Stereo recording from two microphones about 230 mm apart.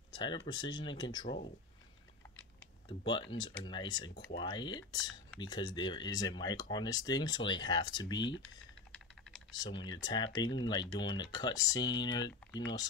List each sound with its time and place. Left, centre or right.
0.1 s a sound: centre
0.5 s speech: left
2.9 s speech: left
8.9 s typing: centre
9.5 s speech: centre